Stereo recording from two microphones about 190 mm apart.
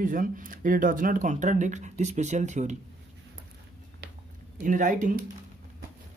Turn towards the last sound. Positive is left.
turn(degrees=-40)  # may be behind; listen again after turning